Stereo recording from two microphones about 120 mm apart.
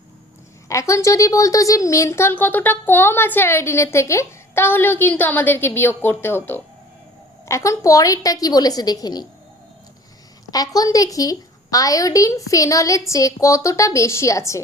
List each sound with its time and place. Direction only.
0.7 s a woman's voice: 25° left (ahead or behind)
10.5 s a woman's voice: 30° left (ahead or behind)